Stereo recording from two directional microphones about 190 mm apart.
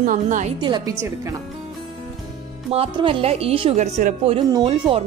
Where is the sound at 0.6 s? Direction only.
25° right (ahead or behind).